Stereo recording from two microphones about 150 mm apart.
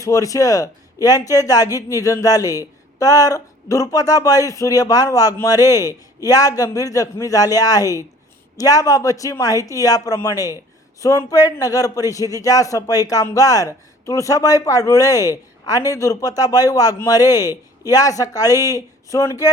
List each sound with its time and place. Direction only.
0.0 s a man's voice: 20° left (ahead or behind)